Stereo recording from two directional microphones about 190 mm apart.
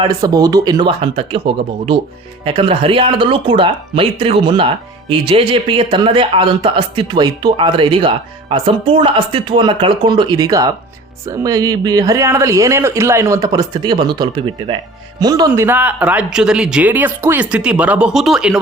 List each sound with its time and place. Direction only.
0.0 s a man's voice: 20° right (ahead or behind); by 18.6 s 5° right (ahead or behind)